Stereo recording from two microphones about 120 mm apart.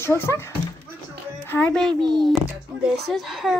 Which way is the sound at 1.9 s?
40° right (ahead or behind).